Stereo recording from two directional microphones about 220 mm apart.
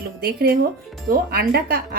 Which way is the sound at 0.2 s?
45° right (ahead or behind).